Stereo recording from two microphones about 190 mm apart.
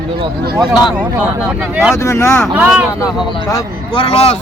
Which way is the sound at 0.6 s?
Centre (ahead or behind).